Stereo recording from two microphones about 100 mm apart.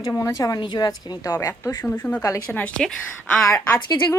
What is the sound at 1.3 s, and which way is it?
A woman's voice, 30° left (ahead or behind).